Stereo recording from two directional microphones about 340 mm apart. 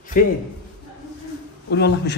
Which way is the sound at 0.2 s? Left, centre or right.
Left.